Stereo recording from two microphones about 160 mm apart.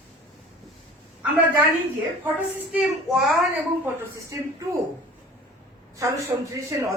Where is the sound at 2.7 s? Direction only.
Centre (ahead or behind).